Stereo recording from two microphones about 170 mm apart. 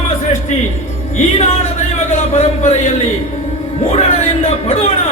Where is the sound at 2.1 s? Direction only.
40° left (ahead or behind).